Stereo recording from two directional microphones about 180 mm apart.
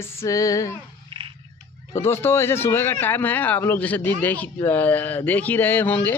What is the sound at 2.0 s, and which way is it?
Speech, 15° left (ahead or behind).